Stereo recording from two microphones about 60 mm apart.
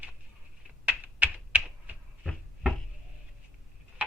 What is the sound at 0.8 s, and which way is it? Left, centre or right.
Computer keyboard, right.